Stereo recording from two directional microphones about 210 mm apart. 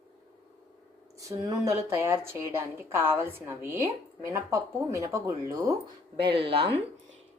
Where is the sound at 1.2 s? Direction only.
15° right (ahead or behind).